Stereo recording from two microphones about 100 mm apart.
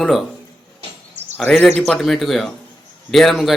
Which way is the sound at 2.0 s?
Centre (ahead or behind).